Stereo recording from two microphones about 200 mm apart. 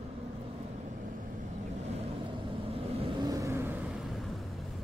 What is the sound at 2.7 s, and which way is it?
Vehicle, 25° right (ahead or behind).